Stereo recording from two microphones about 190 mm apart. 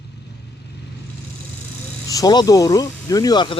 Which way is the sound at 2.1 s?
20° left (ahead or behind).